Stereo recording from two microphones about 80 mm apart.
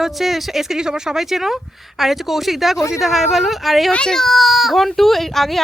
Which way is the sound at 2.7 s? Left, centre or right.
Left.